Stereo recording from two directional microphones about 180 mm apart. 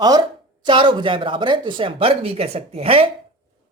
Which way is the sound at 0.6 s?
25° right (ahead or behind).